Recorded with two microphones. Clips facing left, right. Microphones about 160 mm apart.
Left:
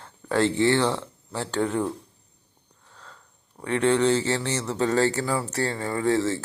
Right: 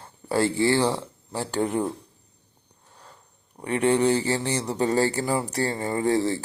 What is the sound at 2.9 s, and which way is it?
Speech, 15° right (ahead or behind).